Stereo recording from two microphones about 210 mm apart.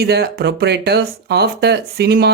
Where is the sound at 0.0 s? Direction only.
50° right (ahead or behind).